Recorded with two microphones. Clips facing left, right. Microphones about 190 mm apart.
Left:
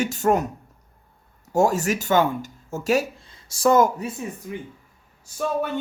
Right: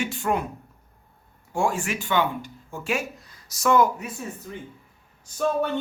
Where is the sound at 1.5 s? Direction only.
40° left (ahead or behind).